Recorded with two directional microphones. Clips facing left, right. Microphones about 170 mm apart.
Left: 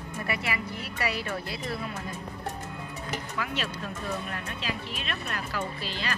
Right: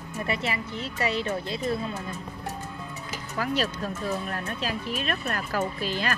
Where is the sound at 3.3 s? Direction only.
40° right (ahead or behind).